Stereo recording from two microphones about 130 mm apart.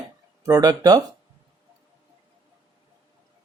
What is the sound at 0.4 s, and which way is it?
Speech, 30° right (ahead or behind).